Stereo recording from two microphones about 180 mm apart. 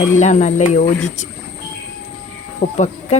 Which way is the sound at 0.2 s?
40° left (ahead or behind).